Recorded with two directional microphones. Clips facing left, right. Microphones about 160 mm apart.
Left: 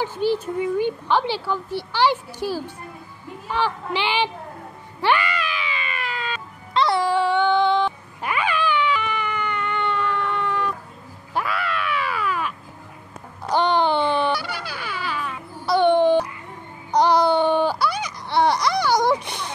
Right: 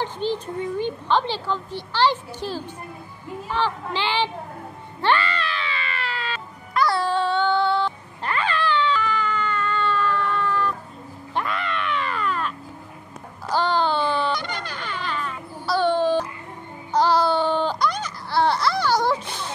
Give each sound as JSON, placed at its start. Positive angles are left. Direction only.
{"t": 0.0, "sound": "a woman's voice", "side_deg": 10}
{"t": 5.0, "sound": "music", "side_deg": 10}
{"t": 7.0, "sound": "cat", "side_deg": 10}
{"t": 11.3, "sound": "crow", "side_deg": 5}
{"t": 13.5, "sound": "a sound", "side_deg": 20}
{"t": 14.3, "sound": "music", "side_deg": 5}
{"t": 15.7, "sound": "a sound", "side_deg": 20}
{"t": 16.9, "sound": "babbling", "side_deg": 15}